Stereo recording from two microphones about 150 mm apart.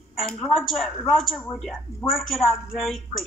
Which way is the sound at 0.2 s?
5° left (ahead or behind).